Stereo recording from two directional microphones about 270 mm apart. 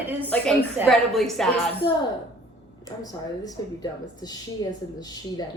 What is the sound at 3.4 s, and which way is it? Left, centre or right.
Speech, centre.